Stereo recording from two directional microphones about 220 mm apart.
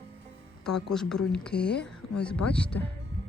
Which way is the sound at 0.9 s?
5° left (ahead or behind).